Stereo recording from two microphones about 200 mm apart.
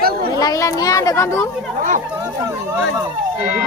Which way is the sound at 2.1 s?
15° right (ahead or behind).